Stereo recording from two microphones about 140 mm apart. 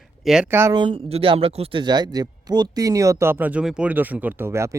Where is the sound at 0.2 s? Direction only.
5° right (ahead or behind).